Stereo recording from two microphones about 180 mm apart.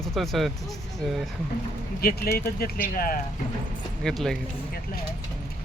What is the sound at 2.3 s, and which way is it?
Speech, 55° left (ahead or behind).